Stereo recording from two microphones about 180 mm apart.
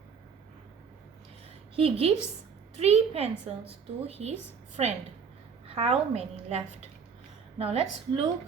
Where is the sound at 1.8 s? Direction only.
35° right (ahead or behind).